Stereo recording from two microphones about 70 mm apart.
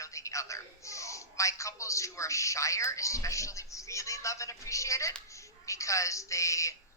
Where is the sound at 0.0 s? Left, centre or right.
Left.